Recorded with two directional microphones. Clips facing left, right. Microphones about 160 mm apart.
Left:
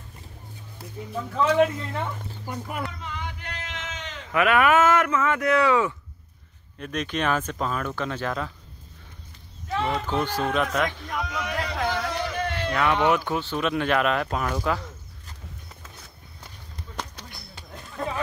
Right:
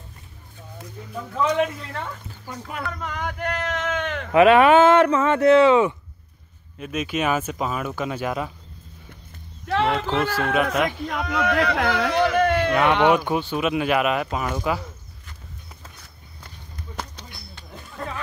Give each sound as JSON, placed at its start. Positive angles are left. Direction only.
{"t": 1.0, "sound": "speech", "side_deg": 10}
{"t": 2.0, "sound": "speech", "side_deg": 15}
{"t": 2.9, "sound": "a sound", "side_deg": -50}
{"t": 4.3, "sound": "speech", "side_deg": -25}
{"t": 6.8, "sound": "speech", "side_deg": -5}
{"t": 9.7, "sound": "speech", "side_deg": -75}
{"t": 10.5, "sound": "speech", "side_deg": -10}
{"t": 11.1, "sound": "speech", "side_deg": -60}
{"t": 13.1, "sound": "speech", "side_deg": -15}
{"t": 17.2, "sound": "a sound", "side_deg": 5}